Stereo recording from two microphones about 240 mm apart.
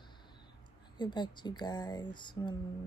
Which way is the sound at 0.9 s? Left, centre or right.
Centre.